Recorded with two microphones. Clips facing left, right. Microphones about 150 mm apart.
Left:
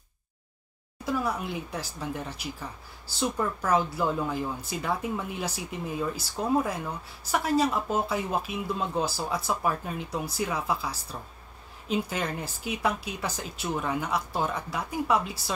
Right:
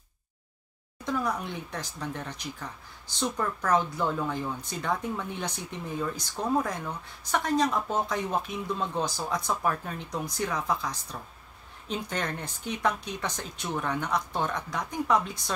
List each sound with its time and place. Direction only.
1.0 s speech: 5° left (ahead or behind)